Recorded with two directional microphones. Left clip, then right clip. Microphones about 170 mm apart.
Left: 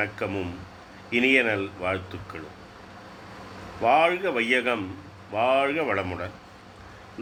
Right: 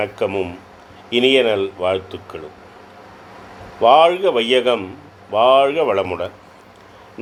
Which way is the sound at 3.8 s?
25° right (ahead or behind).